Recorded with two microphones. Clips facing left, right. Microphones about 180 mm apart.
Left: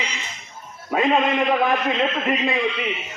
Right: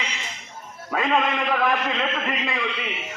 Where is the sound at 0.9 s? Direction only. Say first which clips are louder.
Left 3 dB; 20° left (ahead or behind).